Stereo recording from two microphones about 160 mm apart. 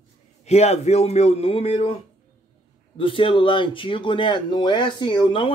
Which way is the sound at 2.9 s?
30° left (ahead or behind).